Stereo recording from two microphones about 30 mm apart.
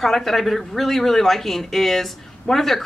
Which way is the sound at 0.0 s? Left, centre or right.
Centre.